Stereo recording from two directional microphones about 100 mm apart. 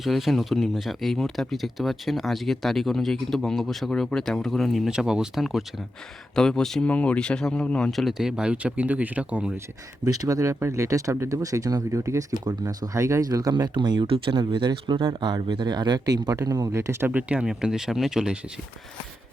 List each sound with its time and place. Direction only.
0.0 s speech: centre (ahead or behind)
10.1 s speech: 35° right (ahead or behind)
17.1 s speech: 15° right (ahead or behind)